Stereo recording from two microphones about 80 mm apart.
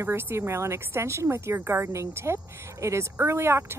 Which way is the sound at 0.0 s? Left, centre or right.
Right.